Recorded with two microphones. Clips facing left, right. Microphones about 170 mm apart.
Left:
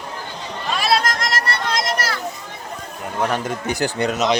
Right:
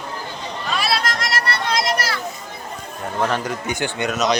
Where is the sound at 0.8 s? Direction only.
45° left (ahead or behind).